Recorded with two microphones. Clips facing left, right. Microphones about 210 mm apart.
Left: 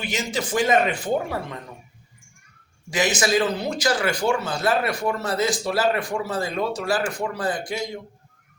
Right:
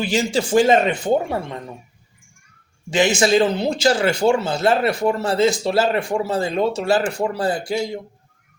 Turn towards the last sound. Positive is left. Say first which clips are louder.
# right 5 dB
turn(degrees=-30)  # may be behind; listen again after turning